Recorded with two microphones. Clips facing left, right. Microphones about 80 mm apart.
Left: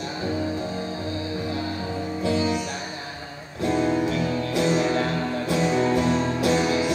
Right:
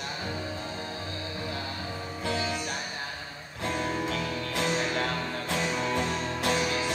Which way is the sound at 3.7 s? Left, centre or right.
Left.